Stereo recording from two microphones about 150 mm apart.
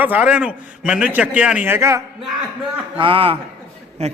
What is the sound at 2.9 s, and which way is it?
Speech, 35° right (ahead or behind).